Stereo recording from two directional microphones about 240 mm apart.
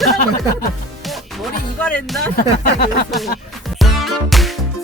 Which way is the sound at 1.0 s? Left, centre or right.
Centre.